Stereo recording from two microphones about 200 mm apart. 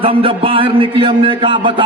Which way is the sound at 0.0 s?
25° right (ahead or behind).